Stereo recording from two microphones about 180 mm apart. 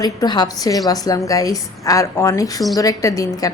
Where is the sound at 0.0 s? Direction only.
20° left (ahead or behind).